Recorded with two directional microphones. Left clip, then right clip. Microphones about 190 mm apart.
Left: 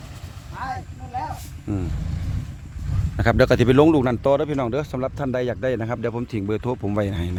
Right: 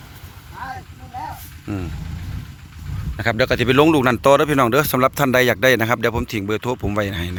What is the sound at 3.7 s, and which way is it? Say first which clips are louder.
Speech: right 2 dB; 5° left (ahead or behind).